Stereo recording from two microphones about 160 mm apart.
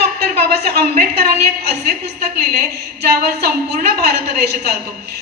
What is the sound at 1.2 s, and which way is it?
Speech, 90° right.